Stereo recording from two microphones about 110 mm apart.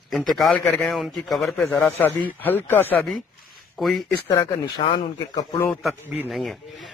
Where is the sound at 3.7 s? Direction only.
Centre (ahead or behind).